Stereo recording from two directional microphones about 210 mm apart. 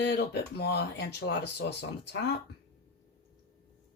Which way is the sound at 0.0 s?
55° left (ahead or behind).